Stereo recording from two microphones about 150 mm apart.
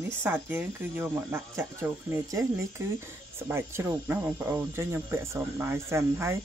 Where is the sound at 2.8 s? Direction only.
20° right (ahead or behind).